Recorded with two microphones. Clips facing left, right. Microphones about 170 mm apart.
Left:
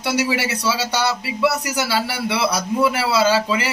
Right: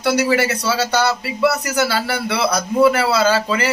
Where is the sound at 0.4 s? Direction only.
45° right (ahead or behind).